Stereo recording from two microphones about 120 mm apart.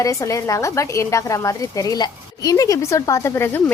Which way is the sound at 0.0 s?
25° left (ahead or behind).